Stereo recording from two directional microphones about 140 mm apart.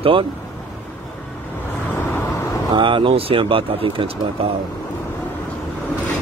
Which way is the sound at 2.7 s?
35° right (ahead or behind).